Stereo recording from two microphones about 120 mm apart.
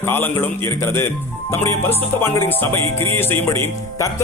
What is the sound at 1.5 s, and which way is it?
Music, 20° left (ahead or behind).